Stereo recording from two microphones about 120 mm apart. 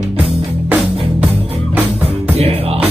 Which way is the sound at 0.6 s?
10° right (ahead or behind).